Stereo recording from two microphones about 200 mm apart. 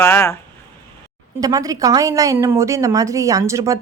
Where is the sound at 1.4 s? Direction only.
15° right (ahead or behind).